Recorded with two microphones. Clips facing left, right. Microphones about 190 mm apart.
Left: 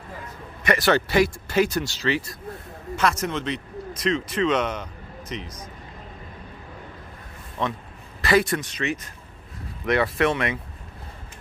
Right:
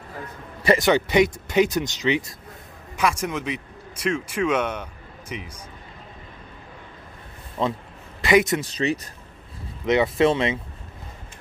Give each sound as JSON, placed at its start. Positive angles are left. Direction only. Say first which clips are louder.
{"t": 0.7, "sound": "a man's voice", "louder": "even", "side_deg": -20}
{"t": 7.6, "sound": "speech", "louder": "right 3 dB", "side_deg": -10}
{"t": 8.2, "sound": "speech", "louder": "right 2 dB", "side_deg": -20}
{"t": 8.5, "sound": "speech", "louder": "right 4 dB", "side_deg": -35}
{"t": 9.8, "sound": "speech", "louder": "right 3 dB", "side_deg": -20}